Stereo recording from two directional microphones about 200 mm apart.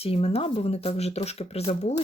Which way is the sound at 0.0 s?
30° left (ahead or behind).